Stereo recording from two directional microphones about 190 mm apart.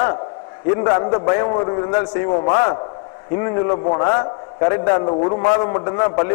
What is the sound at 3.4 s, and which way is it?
A man's voice, 25° left (ahead or behind).